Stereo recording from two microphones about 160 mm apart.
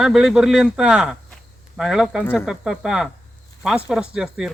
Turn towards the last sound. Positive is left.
turn(degrees=-5)  # may be behind; listen again after turning